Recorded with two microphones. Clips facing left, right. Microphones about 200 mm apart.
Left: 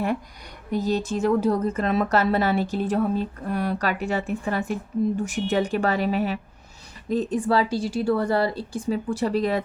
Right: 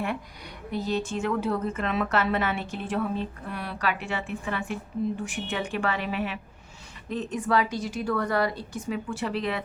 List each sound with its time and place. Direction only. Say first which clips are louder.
0.7 s a woman's voice: left 4 dB; 40° left (ahead or behind)